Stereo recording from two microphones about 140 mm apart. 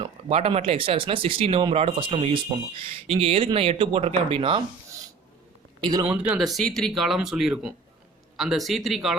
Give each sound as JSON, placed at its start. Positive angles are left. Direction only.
{"t": 0.0, "sound": "speech", "side_deg": -45}
{"t": 5.8, "sound": "a man's voice", "side_deg": -30}
{"t": 6.1, "sound": "speech", "side_deg": -10}